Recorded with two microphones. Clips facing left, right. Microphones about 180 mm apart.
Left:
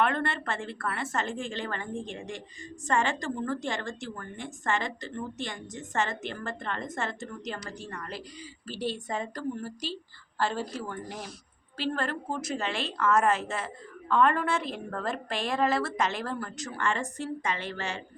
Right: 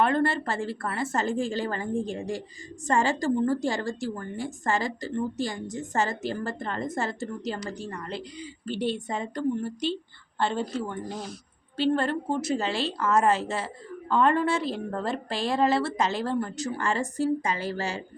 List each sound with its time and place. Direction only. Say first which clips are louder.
0.0 s speech: right 4 dB; 35° right (ahead or behind)